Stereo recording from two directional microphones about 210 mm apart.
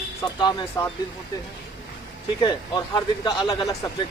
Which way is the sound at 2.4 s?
20° left (ahead or behind).